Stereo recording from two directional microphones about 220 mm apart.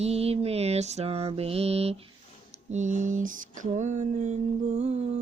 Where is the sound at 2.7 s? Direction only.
35° right (ahead or behind).